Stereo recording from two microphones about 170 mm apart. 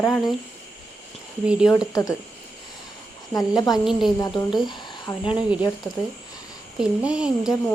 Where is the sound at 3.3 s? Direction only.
20° left (ahead or behind).